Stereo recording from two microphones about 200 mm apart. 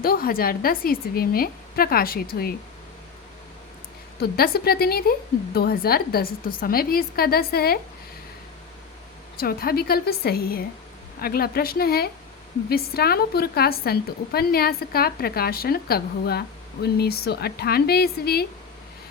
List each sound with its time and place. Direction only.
0.0 s a woman's voice: 45° left (ahead or behind)
4.2 s a woman's voice: 50° left (ahead or behind)
9.4 s a woman's voice: 50° left (ahead or behind)